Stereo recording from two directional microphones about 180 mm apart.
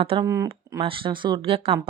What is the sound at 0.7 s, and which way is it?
Speech, 30° right (ahead or behind).